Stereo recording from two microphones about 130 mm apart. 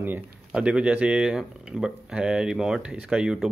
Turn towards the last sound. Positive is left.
turn(degrees=-5)  # may be behind; listen again after turning